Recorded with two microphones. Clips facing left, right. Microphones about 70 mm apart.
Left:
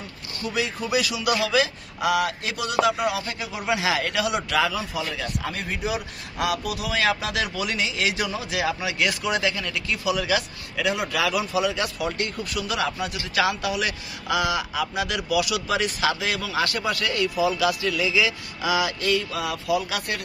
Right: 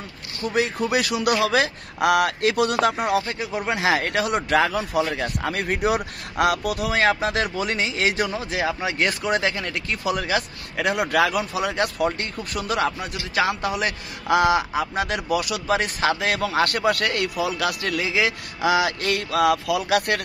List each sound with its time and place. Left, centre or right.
0.4 s a man's voice: right